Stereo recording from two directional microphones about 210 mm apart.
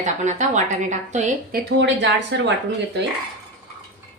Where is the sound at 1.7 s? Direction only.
55° right (ahead or behind).